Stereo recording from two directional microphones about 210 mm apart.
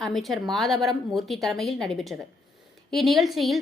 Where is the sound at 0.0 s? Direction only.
Centre (ahead or behind).